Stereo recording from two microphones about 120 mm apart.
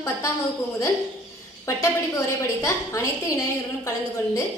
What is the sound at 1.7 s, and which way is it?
A woman's voice, 25° left (ahead or behind).